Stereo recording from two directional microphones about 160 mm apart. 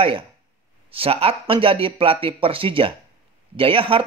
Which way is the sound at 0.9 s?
35° right (ahead or behind).